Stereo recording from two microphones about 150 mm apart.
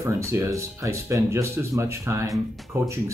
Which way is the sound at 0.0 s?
15° right (ahead or behind).